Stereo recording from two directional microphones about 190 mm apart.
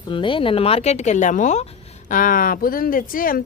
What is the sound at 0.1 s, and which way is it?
Speech, 25° left (ahead or behind).